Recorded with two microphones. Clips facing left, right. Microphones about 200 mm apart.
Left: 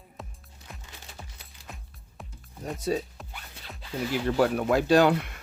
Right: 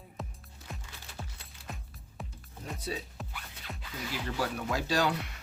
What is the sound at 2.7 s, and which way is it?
Speech, 45° left (ahead or behind).